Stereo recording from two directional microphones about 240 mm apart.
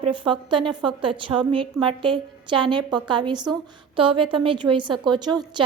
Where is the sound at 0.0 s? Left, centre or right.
Centre.